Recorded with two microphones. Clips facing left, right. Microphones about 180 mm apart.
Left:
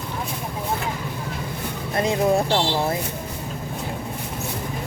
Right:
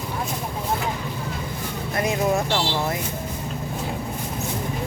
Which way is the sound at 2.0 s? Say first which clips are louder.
Left 3 dB; 30° left (ahead or behind).